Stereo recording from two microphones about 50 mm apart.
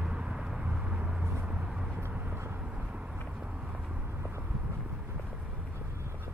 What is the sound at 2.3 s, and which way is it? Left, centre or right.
Vehicle, right.